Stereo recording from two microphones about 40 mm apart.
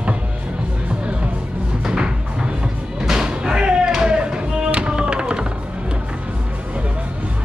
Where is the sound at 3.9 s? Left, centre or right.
Right.